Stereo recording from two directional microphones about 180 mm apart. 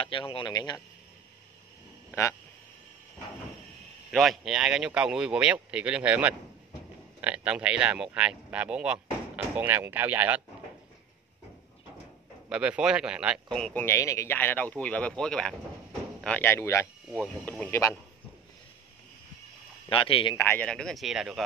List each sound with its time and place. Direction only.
0.0 s speech: 30° left (ahead or behind)
4.1 s speech: centre (ahead or behind)
12.4 s speech: 5° right (ahead or behind); by 16.9 s 15° left (ahead or behind)
17.1 s speech: 5° left (ahead or behind)
19.9 s speech: 30° left (ahead or behind)
20.3 s speech: 10° left (ahead or behind)